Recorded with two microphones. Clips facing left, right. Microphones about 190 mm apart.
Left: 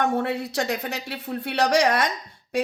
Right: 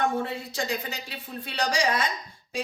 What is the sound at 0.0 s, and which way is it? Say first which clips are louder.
A woman's voice: left 4 dB; 65° left (ahead or behind).